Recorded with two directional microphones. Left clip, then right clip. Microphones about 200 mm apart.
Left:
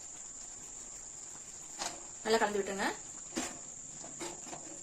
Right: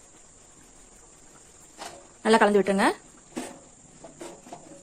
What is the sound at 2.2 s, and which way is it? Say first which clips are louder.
Speech: right 11 dB; 45° right (ahead or behind).